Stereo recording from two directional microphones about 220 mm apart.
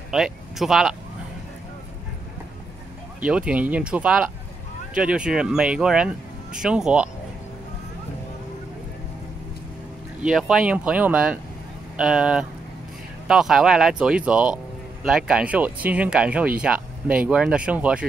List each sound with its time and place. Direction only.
0.1 s speech: centre (ahead or behind)
3.2 s speech: 5° right (ahead or behind)
10.2 s speech: 5° right (ahead or behind)